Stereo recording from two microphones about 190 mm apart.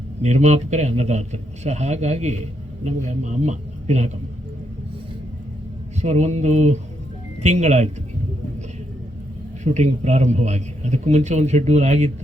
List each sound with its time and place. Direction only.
0.2 s a man's voice: 35° right (ahead or behind)
6.0 s a man's voice: 35° right (ahead or behind)
9.6 s a man's voice: 35° right (ahead or behind)